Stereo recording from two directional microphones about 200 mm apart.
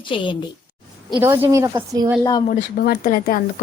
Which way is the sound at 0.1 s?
25° left (ahead or behind).